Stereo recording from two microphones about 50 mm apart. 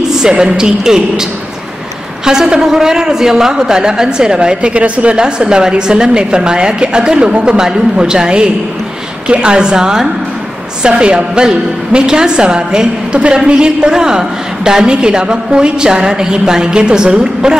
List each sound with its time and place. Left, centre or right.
0.2 s a woman's voice: centre
2.2 s a woman's voice: centre